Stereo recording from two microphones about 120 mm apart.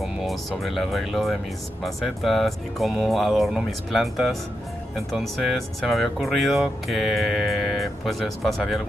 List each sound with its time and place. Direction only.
0.0 s speech: centre (ahead or behind)